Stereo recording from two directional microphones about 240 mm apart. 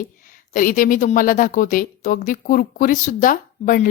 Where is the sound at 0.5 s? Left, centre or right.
Left.